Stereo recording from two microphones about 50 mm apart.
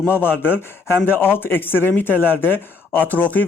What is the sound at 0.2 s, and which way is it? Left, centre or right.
Speech, left.